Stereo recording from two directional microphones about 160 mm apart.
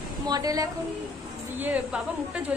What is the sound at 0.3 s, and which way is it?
Speech, 20° right (ahead or behind).